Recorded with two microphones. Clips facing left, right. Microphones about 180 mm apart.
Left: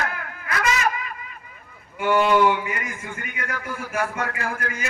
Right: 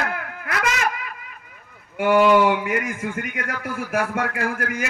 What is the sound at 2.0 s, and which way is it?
A man's voice, 65° right (ahead or behind).